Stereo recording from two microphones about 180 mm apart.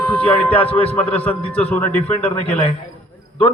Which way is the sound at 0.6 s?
30° left (ahead or behind).